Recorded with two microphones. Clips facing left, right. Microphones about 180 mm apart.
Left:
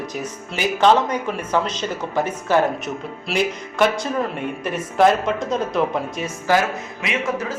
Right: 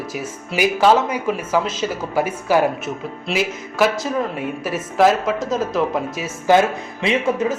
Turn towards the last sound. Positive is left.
turn(degrees=-25)  # may be behind; listen again after turning